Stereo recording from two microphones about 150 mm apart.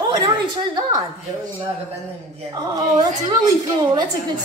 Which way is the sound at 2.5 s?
25° right (ahead or behind).